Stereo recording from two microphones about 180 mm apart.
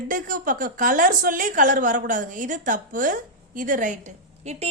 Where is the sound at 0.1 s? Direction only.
50° right (ahead or behind).